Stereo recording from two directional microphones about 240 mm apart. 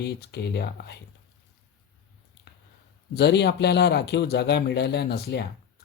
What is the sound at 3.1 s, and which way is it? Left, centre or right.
Speech, left.